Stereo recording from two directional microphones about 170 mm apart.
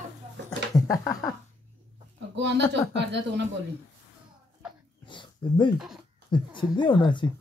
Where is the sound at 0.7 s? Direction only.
20° left (ahead or behind).